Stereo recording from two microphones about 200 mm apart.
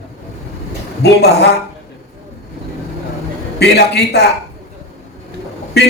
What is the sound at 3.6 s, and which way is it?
Speech, 55° left (ahead or behind).